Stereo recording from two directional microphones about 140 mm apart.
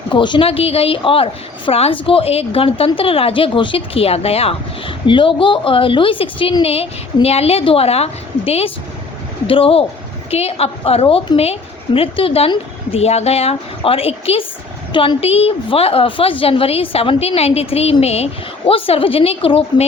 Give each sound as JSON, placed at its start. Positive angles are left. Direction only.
{"t": 0.1, "sound": "a woman's voice", "side_deg": 35}